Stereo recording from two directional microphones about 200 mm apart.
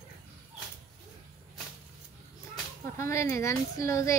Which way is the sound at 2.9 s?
15° left (ahead or behind).